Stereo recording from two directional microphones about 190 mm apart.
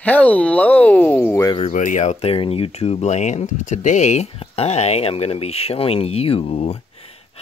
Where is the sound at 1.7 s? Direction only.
45° left (ahead or behind).